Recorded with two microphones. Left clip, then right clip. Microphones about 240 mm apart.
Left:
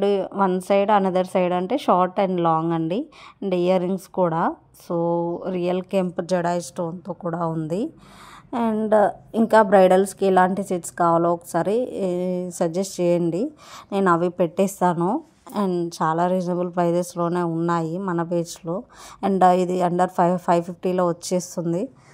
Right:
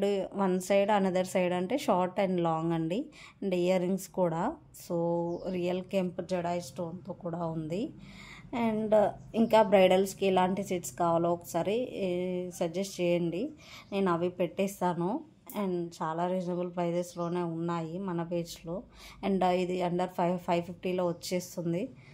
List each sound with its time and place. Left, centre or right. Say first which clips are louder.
0.0 s a woman's voice: left 9 dB; centre
6.1 s a woman's voice: left 10 dB; left